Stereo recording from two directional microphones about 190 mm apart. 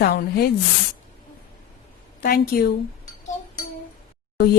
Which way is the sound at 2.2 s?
55° left (ahead or behind).